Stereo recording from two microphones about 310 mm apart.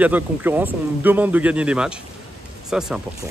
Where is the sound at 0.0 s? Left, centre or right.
Centre.